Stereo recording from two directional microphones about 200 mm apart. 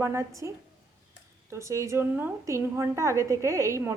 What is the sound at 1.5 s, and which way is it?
A woman's voice, 15° right (ahead or behind).